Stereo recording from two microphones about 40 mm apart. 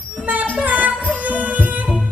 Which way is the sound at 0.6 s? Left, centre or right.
Right.